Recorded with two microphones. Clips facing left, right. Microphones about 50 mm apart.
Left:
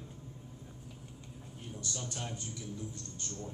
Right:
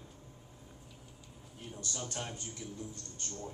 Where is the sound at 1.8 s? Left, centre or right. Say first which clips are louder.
Right 1 dB; right.